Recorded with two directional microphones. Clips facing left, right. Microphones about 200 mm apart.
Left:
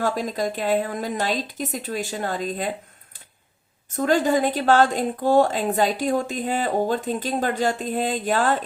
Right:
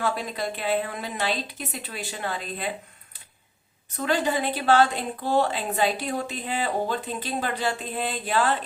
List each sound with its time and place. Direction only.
0.0 s a woman's voice: 40° left (ahead or behind)
3.9 s a woman's voice: 45° left (ahead or behind)